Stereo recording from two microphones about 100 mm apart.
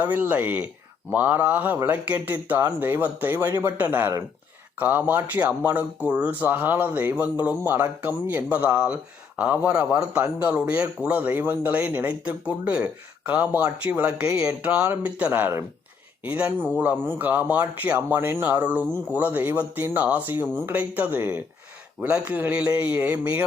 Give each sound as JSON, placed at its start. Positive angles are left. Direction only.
{"t": 0.0, "sound": "speech", "side_deg": -20}